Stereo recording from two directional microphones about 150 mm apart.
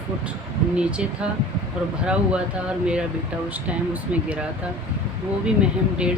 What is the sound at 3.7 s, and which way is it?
Speech, 10° right (ahead or behind).